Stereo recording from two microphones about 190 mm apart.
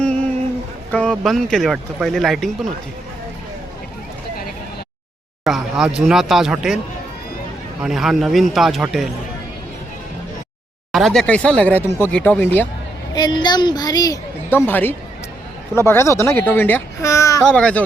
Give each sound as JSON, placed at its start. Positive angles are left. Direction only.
{"t": 0.9, "sound": "speech", "side_deg": 5}
{"t": 5.5, "sound": "speech", "side_deg": -5}
{"t": 7.8, "sound": "speech", "side_deg": 0}
{"t": 10.9, "sound": "speech", "side_deg": 0}
{"t": 13.1, "sound": "a woman's voice", "side_deg": 20}
{"t": 17.4, "sound": "speech", "side_deg": 5}